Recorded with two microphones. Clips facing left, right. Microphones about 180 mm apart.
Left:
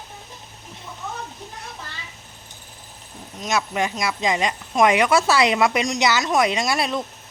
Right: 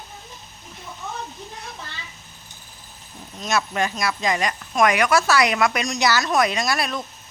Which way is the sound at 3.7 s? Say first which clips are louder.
Even; 20° left (ahead or behind).